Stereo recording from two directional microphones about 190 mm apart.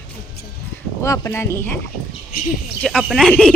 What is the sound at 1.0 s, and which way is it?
Speech, 15° left (ahead or behind).